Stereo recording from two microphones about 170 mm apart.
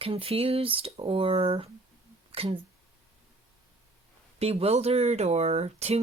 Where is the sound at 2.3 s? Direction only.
35° right (ahead or behind).